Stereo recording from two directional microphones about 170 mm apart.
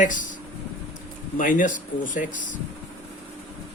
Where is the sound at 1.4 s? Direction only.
50° left (ahead or behind).